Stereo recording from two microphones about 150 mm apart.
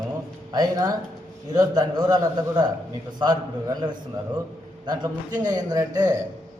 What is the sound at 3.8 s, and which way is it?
Speech, 30° right (ahead or behind).